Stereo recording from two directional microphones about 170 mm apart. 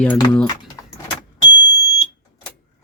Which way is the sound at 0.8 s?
20° left (ahead or behind).